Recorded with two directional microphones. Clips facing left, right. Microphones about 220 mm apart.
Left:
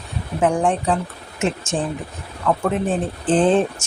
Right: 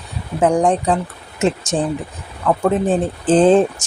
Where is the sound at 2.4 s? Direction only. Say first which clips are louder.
Right 4 dB; 35° right (ahead or behind).